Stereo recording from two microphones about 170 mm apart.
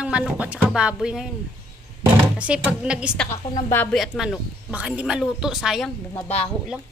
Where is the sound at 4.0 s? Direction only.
Centre (ahead or behind).